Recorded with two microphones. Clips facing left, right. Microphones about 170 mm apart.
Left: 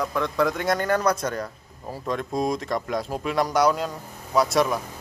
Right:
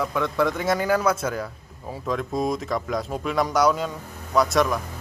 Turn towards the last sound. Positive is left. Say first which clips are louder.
# even
turn(degrees=0)  # may be behind; listen again after turning